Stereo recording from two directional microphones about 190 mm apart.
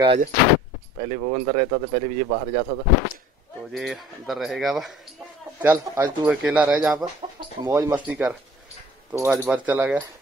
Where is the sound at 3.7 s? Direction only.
Centre (ahead or behind).